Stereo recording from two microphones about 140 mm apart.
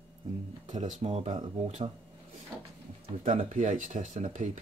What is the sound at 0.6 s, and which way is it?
Speech, 60° right (ahead or behind).